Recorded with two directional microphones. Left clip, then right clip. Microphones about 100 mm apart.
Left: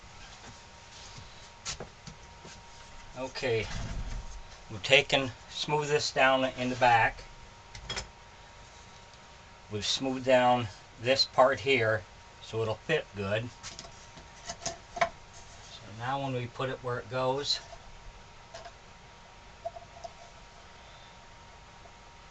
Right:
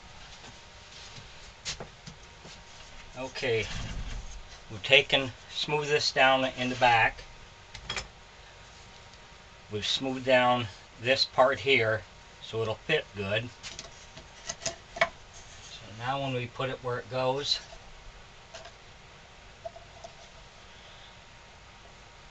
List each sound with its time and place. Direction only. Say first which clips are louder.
3.2 s speech: right 1 dB; centre (ahead or behind)
4.8 s speech: right 2 dB; 25° left (ahead or behind)
5.6 s speech: right 1 dB; 10° left (ahead or behind)
9.7 s speech: right 1 dB; 20° left (ahead or behind)
14.4 s rub: right 2 dB; centre (ahead or behind)
16.0 s speech: right 1 dB; 5° left (ahead or behind)